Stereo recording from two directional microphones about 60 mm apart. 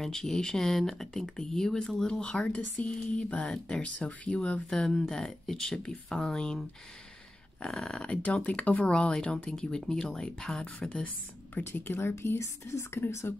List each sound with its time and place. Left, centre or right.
0.0 s speech: centre
7.6 s speech: centre
8.0 s speech: centre
11.5 s speech: left
12.0 s speech: left
13.3 s speech: left